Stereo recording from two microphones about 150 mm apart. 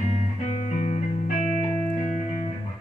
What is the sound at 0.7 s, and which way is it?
Music, 50° left (ahead or behind).